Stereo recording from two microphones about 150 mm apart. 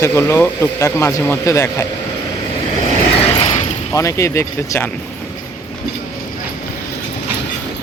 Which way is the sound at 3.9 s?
20° left (ahead or behind).